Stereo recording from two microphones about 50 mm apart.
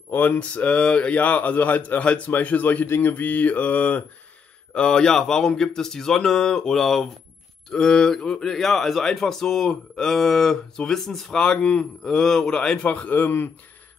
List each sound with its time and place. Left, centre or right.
0.1 s speech: left
2.3 s mantra: left
4.7 s speech: centre
7.7 s speech: centre
11.3 s speech: centre
12.0 s speech: centre
12.8 s speech: left
13.1 s speech: left